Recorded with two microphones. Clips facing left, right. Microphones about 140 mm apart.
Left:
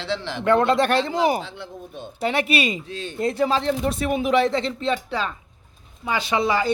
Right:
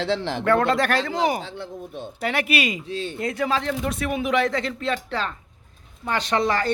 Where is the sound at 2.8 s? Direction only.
30° right (ahead or behind).